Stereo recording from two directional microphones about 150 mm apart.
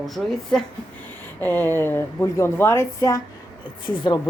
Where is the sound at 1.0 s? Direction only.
10° left (ahead or behind).